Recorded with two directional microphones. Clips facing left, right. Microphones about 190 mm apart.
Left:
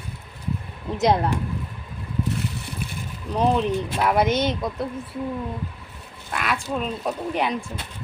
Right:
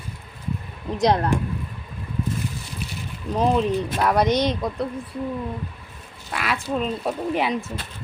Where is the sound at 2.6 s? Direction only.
55° left (ahead or behind).